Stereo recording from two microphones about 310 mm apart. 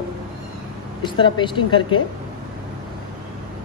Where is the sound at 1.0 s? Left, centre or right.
Centre.